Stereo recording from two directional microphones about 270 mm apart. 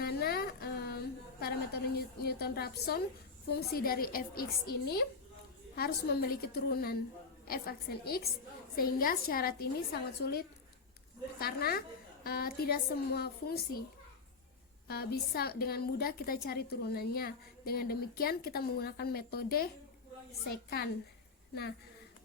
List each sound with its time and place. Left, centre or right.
0.0 s a sound: left
3.5 s a woman's voice: left
5.7 s a woman's voice: left
14.8 s a woman's voice: left